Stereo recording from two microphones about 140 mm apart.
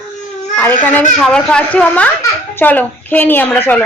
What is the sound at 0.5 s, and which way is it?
A woman's voice, 10° left (ahead or behind).